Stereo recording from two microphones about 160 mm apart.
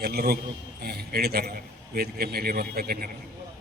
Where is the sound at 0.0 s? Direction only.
75° right (ahead or behind).